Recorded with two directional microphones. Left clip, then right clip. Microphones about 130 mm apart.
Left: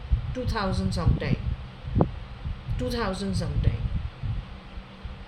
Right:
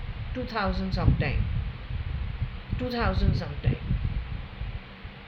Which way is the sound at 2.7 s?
20° left (ahead or behind).